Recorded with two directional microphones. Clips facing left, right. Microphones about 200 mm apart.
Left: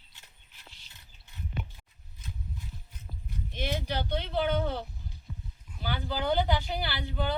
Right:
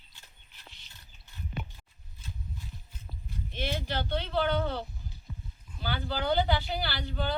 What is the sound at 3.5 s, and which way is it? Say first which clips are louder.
Speech: left 1 dB; 15° left (ahead or behind).